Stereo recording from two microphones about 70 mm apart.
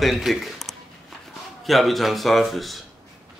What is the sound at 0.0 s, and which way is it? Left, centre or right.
Speech, centre.